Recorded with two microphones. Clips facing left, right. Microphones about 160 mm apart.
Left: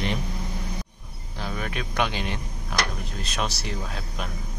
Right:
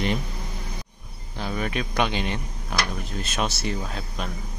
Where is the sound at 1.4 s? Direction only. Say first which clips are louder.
Right 3 dB; 5° right (ahead or behind).